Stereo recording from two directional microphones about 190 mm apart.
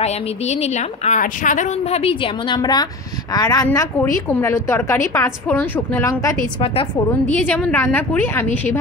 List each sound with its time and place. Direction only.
0.0 s a woman's voice: 35° left (ahead or behind); by 6.3 s 15° left (ahead or behind)
6.6 s a woman's voice: 30° left (ahead or behind)
7.3 s a woman's voice: 10° left (ahead or behind)